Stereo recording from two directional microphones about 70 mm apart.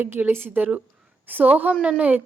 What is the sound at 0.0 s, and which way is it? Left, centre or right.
A woman's voice, right.